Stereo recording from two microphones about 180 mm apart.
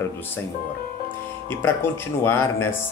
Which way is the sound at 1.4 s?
10° left (ahead or behind).